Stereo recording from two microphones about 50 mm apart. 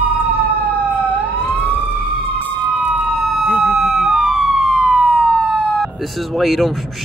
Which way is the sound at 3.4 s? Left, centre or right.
Right.